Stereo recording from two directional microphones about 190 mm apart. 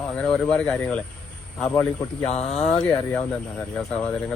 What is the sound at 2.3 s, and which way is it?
Speech, 35° left (ahead or behind).